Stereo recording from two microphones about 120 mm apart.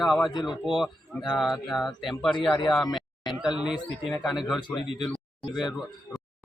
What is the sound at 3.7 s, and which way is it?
Speech, 45° left (ahead or behind).